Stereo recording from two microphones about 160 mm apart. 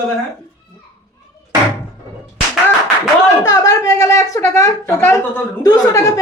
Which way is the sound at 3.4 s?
20° left (ahead or behind).